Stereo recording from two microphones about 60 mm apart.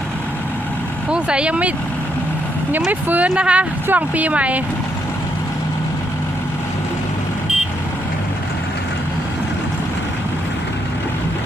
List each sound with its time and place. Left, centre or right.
1.1 s speech: centre
2.9 s speech: right